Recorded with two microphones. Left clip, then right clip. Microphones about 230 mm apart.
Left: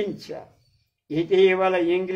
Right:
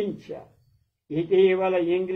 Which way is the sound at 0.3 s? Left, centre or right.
Left.